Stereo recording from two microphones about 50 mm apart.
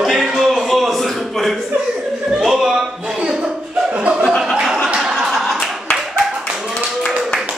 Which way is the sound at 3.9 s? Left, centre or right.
Right.